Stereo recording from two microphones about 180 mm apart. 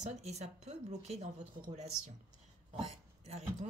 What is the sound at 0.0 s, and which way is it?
Speech, 40° right (ahead or behind).